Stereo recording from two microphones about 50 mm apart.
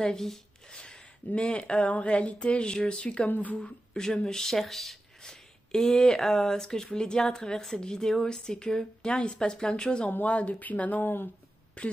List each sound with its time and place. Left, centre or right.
0.1 s speech: centre
0.7 s speech: centre
3.3 s speech: left
3.6 s speech: centre
10.0 s speech: left
11.8 s speech: left